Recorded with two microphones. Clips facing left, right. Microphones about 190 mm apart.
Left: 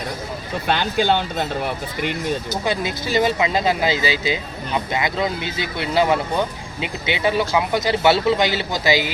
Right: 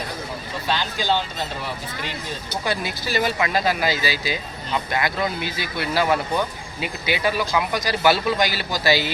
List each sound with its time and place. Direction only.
0.7 s speech: 60° left (ahead or behind)
2.6 s speech: 20° left (ahead or behind)